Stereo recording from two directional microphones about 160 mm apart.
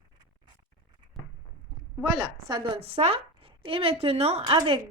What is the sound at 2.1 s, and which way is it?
A woman's voice, 30° right (ahead or behind).